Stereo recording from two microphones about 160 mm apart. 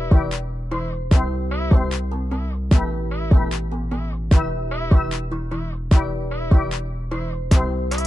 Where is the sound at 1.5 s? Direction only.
15° left (ahead or behind).